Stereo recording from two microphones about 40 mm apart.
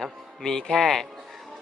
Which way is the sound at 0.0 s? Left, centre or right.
Centre.